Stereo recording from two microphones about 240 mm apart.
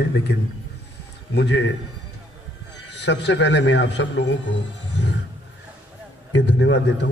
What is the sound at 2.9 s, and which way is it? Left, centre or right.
A man's voice, left.